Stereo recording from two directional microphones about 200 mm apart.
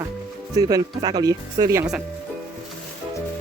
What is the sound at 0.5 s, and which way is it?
Speech, 15° right (ahead or behind).